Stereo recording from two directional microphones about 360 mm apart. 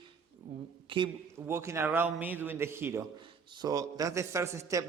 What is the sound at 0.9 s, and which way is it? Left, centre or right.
A man's voice, centre.